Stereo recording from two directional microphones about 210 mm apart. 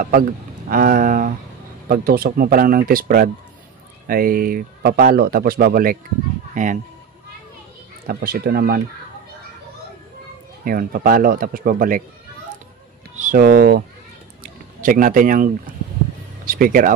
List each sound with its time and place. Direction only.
0.7 s a sound: 40° right (ahead or behind)
1.9 s speech: 45° right (ahead or behind)
8.1 s speech: 45° right (ahead or behind)
10.6 s speech: 40° right (ahead or behind)
13.1 s speech: 40° right (ahead or behind)